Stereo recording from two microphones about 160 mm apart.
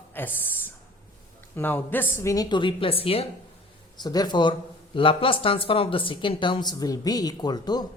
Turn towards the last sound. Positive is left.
turn(degrees=25)  # may be behind; listen again after turning